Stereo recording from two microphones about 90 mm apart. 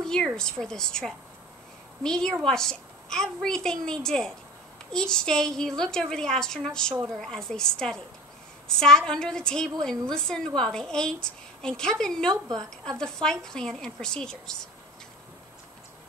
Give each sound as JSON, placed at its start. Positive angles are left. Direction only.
{"t": 0.0, "sound": "a sound", "side_deg": 5}
{"t": 0.4, "sound": "a woman's voice", "side_deg": 5}
{"t": 12.3, "sound": "a woman's voice", "side_deg": -45}
{"t": 12.6, "sound": "a woman's voice", "side_deg": 5}